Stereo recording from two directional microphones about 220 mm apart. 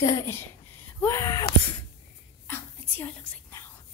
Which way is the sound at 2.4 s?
10° left (ahead or behind).